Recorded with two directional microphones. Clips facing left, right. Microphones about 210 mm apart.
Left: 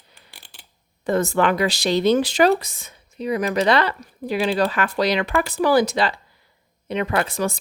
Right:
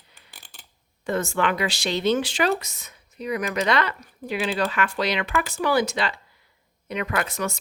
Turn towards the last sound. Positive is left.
turn(degrees=30)  # may be behind; listen again after turning